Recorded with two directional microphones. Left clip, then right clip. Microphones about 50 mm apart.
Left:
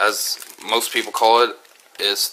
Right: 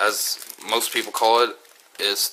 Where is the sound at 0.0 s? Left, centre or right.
Centre.